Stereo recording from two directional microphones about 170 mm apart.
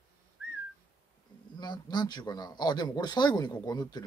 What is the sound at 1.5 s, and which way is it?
Speech, 25° left (ahead or behind).